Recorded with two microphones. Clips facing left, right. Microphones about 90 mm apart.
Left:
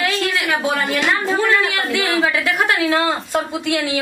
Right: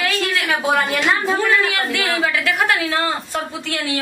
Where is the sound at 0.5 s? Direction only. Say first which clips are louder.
Right 3 dB; 15° right (ahead or behind).